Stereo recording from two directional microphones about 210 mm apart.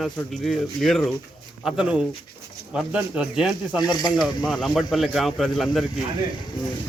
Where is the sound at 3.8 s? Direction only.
20° left (ahead or behind).